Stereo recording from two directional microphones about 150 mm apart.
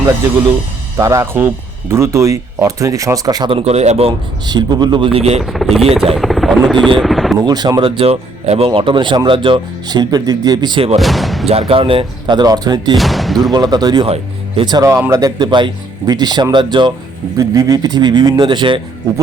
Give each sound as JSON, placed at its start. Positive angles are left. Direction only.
{"t": 0.9, "sound": "speech", "side_deg": -20}
{"t": 3.6, "sound": "speech", "side_deg": -45}
{"t": 4.4, "sound": "speech", "side_deg": -30}
{"t": 5.4, "sound": "speech", "side_deg": 0}
{"t": 7.4, "sound": "speech", "side_deg": -25}
{"t": 11.0, "sound": "speech", "side_deg": 0}
{"t": 11.4, "sound": "speech", "side_deg": -40}
{"t": 13.0, "sound": "speech", "side_deg": 0}
{"t": 13.5, "sound": "speech", "side_deg": -25}